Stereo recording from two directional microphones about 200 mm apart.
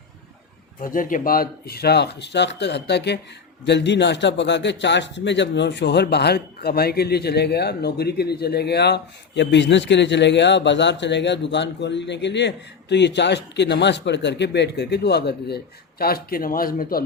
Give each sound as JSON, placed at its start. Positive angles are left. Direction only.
{"t": 0.8, "sound": "a man's voice", "side_deg": 40}